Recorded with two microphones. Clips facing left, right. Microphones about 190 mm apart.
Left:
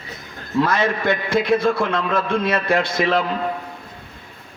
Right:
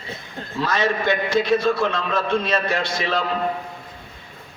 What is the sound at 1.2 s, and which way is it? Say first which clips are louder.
A man's voice: left 1 dB; 55° left (ahead or behind).